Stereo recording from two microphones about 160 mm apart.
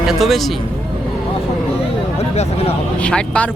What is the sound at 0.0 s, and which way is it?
Speech, centre (ahead or behind).